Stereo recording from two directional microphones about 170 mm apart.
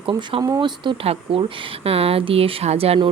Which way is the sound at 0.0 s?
30° right (ahead or behind).